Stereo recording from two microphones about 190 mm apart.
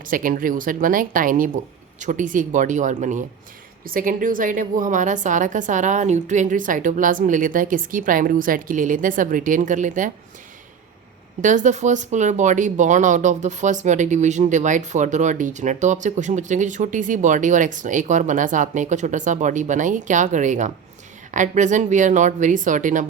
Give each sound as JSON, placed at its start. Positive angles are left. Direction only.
{"t": 0.0, "sound": "a woman's voice", "side_deg": -45}
{"t": 11.4, "sound": "speech", "side_deg": -40}